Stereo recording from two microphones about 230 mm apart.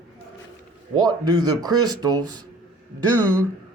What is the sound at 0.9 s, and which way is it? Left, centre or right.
Speech, centre.